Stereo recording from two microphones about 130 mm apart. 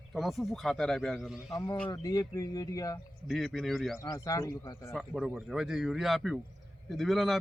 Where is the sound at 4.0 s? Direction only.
25° left (ahead or behind).